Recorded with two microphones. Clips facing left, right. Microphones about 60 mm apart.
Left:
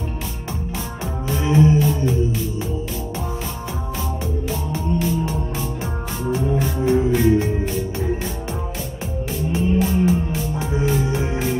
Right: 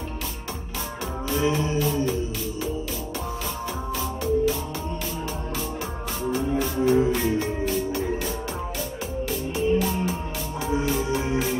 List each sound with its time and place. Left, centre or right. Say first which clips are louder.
1.5 s music: left 8 dB; left
6.3 s music: left 3 dB; left
9.5 s music: left 3 dB; left